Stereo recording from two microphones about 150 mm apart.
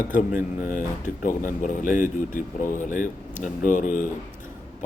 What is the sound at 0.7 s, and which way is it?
Speech, 60° left (ahead or behind).